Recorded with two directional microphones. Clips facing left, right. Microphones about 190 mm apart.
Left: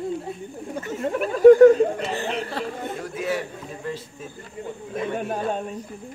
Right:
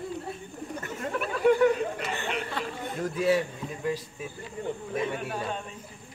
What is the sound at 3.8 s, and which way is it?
Speech, 10° right (ahead or behind).